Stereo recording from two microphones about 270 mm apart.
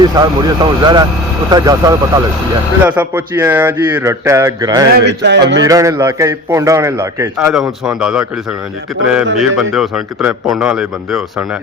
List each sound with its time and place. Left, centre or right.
0.2 s a man's voice: centre
4.9 s speech: right
5.6 s a man's voice: centre
9.6 s a man's voice: centre